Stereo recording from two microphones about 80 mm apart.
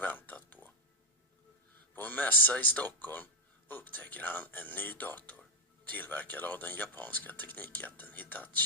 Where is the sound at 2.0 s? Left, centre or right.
Left.